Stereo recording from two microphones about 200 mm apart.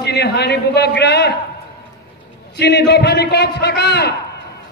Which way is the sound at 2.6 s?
55° left (ahead or behind).